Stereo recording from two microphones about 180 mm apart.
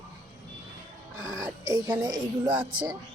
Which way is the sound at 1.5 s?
15° right (ahead or behind).